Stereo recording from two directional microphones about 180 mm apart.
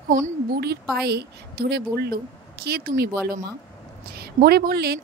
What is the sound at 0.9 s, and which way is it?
A woman's voice, 65° right (ahead or behind).